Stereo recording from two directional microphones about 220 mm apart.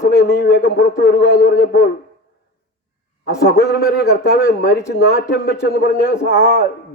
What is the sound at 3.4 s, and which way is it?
A man's voice, 45° left (ahead or behind).